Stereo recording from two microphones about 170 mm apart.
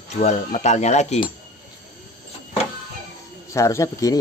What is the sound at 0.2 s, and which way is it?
Speech, 40° left (ahead or behind).